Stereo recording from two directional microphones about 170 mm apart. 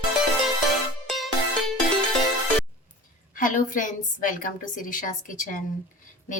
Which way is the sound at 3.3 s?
50° left (ahead or behind).